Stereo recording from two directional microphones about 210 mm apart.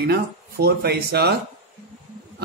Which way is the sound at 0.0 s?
50° right (ahead or behind).